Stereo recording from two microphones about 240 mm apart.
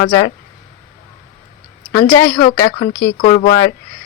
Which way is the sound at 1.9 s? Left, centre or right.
Centre.